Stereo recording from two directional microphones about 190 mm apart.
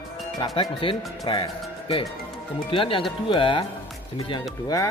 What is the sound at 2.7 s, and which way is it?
Speech, 30° left (ahead or behind).